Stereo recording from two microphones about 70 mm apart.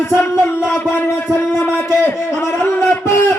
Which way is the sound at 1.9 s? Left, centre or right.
Left.